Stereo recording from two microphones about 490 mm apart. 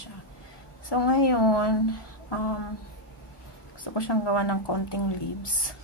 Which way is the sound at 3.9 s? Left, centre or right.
Left.